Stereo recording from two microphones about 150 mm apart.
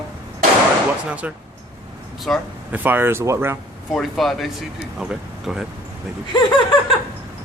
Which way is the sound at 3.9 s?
Centre (ahead or behind).